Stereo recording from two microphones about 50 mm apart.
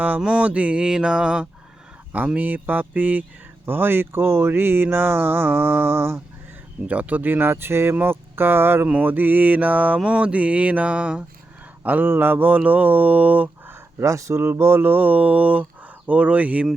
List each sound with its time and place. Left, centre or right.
0.2 s mantra: centre
0.4 s speech: right
0.8 s mantra: centre
2.1 s speech: right
3.7 s a sound: right
6.8 s speech: right
7.2 s a sound: right
9.0 s speech: right
10.0 s speech: right
11.8 s speech: right
14.0 s speech: right
14.3 s speech: right